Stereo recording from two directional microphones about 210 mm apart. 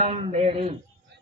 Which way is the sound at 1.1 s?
50° right (ahead or behind).